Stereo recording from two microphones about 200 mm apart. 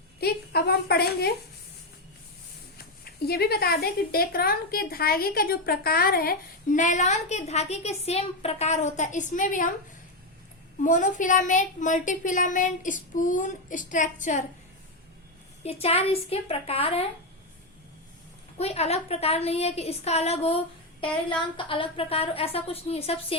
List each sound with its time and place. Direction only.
0.2 s a woman's voice: 50° left (ahead or behind)
2.7 s a woman's voice: 50° left (ahead or behind)
10.8 s a woman's voice: 40° left (ahead or behind)
15.6 s a woman's voice: 30° left (ahead or behind)
18.5 s a woman's voice: 30° left (ahead or behind)